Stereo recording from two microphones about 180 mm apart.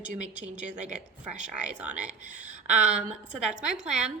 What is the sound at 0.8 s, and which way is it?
Speech, 40° right (ahead or behind).